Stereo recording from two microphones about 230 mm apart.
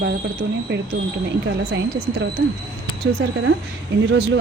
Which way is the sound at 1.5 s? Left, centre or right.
Right.